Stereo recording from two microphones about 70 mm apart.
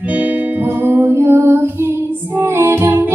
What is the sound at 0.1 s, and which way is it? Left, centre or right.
Music, right.